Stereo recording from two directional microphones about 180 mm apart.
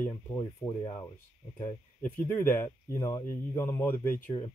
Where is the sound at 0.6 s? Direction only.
20° left (ahead or behind).